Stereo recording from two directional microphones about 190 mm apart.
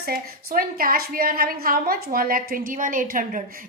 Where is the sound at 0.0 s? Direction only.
50° right (ahead or behind).